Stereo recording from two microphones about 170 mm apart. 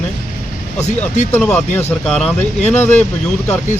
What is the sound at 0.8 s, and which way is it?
Speech, 45° left (ahead or behind).